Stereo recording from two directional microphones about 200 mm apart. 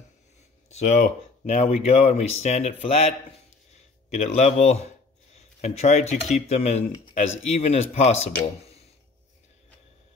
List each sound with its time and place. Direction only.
0.7 s speech: 35° left (ahead or behind)
4.1 s speech: 35° left (ahead or behind)